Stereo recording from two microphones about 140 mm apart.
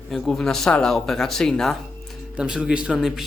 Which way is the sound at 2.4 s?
5° right (ahead or behind).